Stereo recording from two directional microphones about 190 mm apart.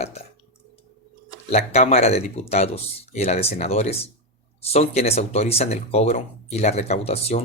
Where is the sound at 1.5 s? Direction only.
35° left (ahead or behind).